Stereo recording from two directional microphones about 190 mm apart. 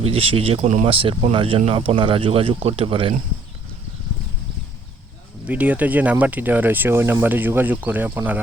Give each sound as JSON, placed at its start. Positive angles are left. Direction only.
{"t": 0.0, "sound": "speech", "side_deg": -30}
{"t": 5.5, "sound": "speech", "side_deg": -10}